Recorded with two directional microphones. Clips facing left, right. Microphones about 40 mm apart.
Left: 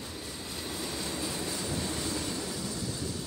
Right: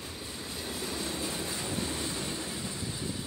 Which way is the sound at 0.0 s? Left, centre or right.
Right.